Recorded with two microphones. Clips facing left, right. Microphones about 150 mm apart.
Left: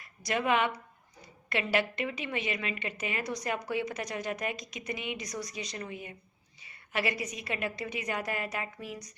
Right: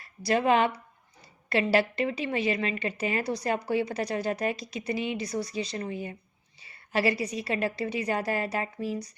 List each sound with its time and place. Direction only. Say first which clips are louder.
0.0 s a woman's voice: right 6 dB; 30° right (ahead or behind)